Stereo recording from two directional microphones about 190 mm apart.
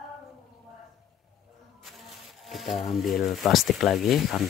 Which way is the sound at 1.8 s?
Centre (ahead or behind).